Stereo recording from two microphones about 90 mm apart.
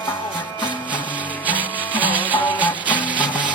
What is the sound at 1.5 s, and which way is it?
Music, 20° right (ahead or behind).